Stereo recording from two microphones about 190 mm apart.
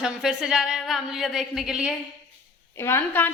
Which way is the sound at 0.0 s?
5° right (ahead or behind).